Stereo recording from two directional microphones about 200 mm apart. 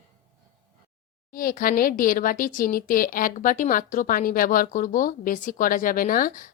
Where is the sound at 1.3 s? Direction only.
45° left (ahead or behind).